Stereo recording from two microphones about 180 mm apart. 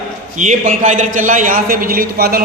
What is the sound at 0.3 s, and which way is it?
A man's voice, 45° right (ahead or behind).